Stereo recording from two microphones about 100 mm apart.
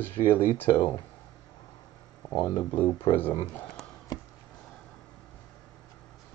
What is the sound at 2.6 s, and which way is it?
Speech, 15° left (ahead or behind).